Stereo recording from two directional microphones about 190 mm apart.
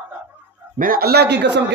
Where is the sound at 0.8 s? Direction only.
50° right (ahead or behind).